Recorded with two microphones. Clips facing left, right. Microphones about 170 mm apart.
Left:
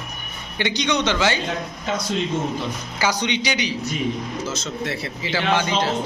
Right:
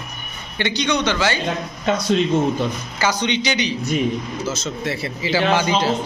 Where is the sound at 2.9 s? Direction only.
10° left (ahead or behind).